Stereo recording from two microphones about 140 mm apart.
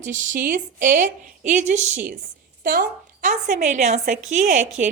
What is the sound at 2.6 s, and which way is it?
A woman's voice, 90° right.